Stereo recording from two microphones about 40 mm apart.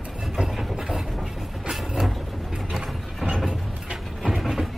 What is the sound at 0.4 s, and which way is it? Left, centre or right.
Wood, centre.